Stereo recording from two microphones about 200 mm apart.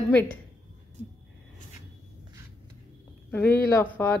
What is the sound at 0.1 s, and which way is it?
Speech, 10° left (ahead or behind).